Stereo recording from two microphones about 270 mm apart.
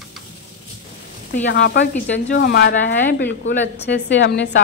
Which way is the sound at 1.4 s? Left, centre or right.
Left.